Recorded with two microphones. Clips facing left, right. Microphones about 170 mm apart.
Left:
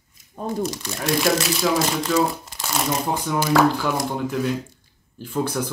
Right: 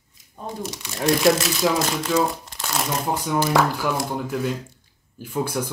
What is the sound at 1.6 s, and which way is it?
Speech, 15° right (ahead or behind).